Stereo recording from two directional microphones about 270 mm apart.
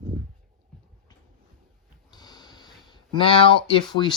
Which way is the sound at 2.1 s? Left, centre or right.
Centre.